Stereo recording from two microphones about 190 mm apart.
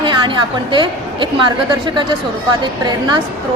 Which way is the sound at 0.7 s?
25° right (ahead or behind).